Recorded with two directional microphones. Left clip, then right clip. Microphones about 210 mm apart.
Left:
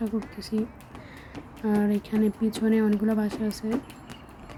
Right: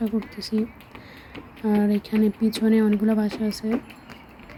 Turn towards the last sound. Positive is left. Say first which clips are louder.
# right 3 dB
turn(degrees=0)  # may be behind; listen again after turning